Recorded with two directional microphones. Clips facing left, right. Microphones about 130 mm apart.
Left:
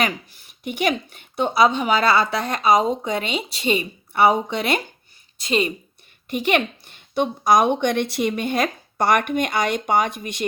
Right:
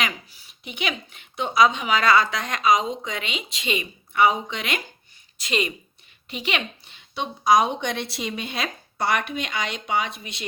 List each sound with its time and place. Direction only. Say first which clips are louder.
0.0 s a woman's voice: left 5 dB; 50° left (ahead or behind)
1.4 s speech: left 2 dB; 35° left (ahead or behind)
6.2 s a woman's voice: left 8 dB; 50° left (ahead or behind)